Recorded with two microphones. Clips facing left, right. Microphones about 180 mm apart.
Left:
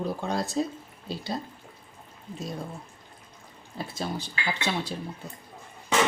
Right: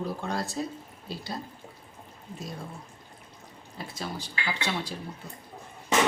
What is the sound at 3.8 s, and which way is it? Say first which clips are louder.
Speech: left 4 dB; 30° left (ahead or behind).